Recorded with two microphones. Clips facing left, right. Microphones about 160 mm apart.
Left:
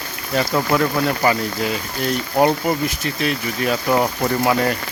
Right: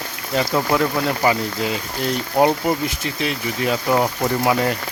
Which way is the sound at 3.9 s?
5° right (ahead or behind).